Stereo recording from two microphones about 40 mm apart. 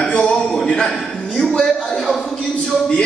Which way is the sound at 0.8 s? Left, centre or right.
Centre.